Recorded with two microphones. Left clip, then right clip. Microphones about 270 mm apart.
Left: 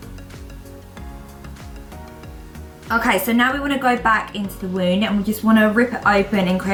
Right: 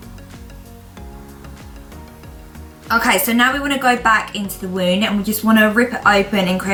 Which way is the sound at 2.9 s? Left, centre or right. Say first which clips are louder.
Right 3 dB; centre.